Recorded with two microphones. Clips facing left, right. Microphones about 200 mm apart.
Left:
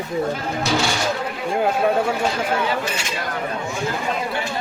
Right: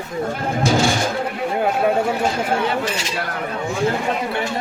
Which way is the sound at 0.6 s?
50° right (ahead or behind).